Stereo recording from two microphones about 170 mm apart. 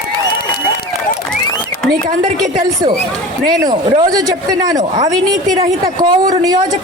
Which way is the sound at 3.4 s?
25° right (ahead or behind).